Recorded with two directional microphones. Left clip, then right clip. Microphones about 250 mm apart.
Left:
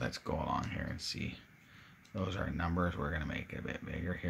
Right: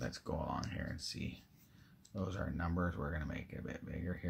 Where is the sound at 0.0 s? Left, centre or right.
Centre.